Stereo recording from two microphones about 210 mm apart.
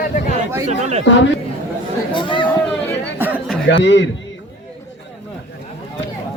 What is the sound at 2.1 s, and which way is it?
Speech, 25° left (ahead or behind).